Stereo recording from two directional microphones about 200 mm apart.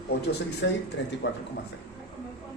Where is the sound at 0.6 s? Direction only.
60° left (ahead or behind).